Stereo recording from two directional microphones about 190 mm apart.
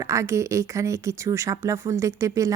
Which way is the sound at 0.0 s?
15° right (ahead or behind).